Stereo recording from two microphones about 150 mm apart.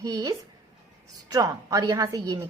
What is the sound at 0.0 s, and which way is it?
A woman's voice, 25° right (ahead or behind).